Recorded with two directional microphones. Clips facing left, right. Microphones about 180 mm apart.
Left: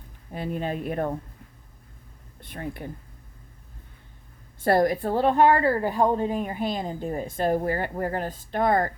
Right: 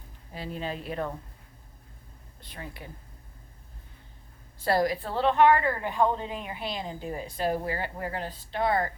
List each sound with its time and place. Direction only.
0.3 s a woman's voice: 55° left (ahead or behind)
2.4 s speech: 55° left (ahead or behind)
4.6 s a woman's voice: 50° left (ahead or behind)